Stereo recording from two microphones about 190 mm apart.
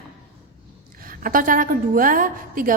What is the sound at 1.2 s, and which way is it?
A woman's voice, 45° right (ahead or behind).